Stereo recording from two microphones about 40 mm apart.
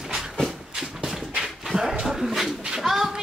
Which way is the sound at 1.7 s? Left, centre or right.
Right.